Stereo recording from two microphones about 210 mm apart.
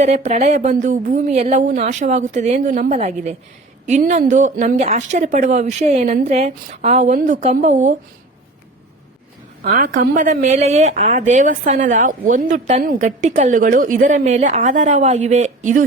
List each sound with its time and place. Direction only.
0.0 s speech: 35° right (ahead or behind)
9.6 s speech: 40° right (ahead or behind)